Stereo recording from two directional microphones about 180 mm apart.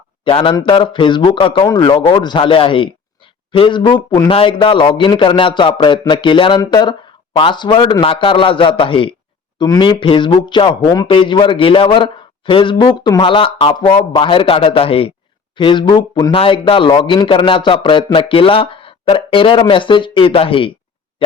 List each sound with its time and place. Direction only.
0.3 s speech: 30° left (ahead or behind)